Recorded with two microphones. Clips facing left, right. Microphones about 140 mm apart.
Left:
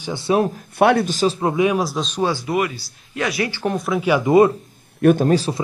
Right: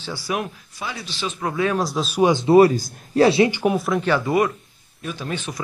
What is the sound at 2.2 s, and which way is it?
Speech, 20° right (ahead or behind).